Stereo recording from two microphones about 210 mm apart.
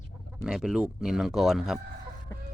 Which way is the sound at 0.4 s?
5° right (ahead or behind).